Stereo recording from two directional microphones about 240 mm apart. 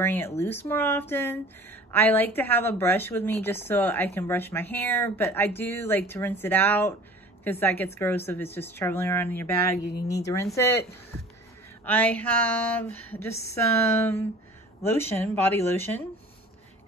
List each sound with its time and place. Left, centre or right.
0.0 s speech: centre